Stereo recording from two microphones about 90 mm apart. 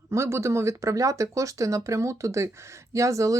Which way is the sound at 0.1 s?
30° right (ahead or behind).